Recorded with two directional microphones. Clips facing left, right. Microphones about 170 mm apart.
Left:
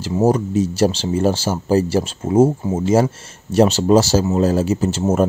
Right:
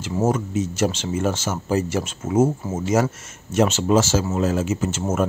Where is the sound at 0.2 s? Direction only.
35° left (ahead or behind).